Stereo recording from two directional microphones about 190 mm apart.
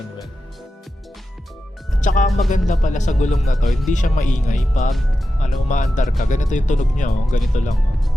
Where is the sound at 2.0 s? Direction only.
40° left (ahead or behind).